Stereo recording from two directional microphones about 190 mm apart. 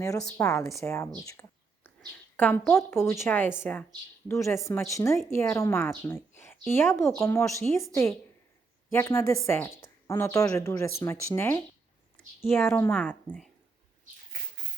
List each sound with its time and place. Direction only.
0.0 s speech: 20° left (ahead or behind)
1.2 s a sound: 15° left (ahead or behind)
2.0 s speech: 10° left (ahead or behind)
8.9 s a woman's voice: 15° left (ahead or behind)